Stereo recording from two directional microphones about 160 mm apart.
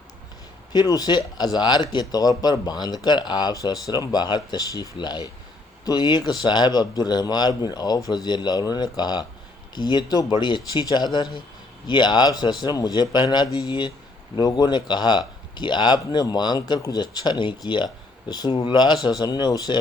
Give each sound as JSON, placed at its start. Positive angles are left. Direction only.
{"t": 0.7, "sound": "speech", "side_deg": 25}